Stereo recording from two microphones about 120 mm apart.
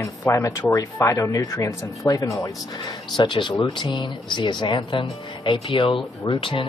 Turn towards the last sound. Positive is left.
turn(degrees=45)  # may be behind; listen again after turning